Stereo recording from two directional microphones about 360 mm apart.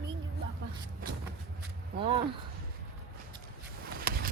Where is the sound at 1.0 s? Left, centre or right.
Right.